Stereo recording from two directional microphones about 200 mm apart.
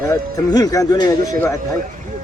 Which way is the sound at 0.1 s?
20° left (ahead or behind).